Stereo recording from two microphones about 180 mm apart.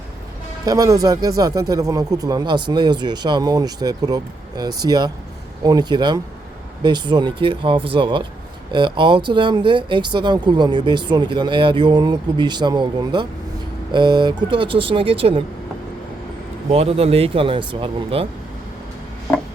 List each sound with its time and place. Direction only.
0.6 s speech: 20° right (ahead or behind)
16.7 s speech: 35° right (ahead or behind)